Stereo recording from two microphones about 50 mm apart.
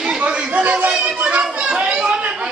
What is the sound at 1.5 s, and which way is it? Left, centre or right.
Children playing, centre.